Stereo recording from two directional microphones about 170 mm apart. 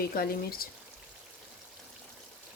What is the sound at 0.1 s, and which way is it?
Speech, 60° left (ahead or behind).